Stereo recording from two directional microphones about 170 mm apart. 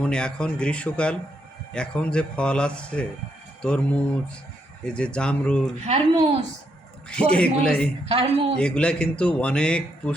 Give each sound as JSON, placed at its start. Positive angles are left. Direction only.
{"t": 0.0, "sound": "a man's voice", "side_deg": 5}
{"t": 5.8, "sound": "a woman's voice", "side_deg": -40}
{"t": 7.1, "sound": "a man's voice", "side_deg": 5}
{"t": 8.0, "sound": "a woman's voice", "side_deg": -35}
{"t": 8.5, "sound": "speech", "side_deg": 5}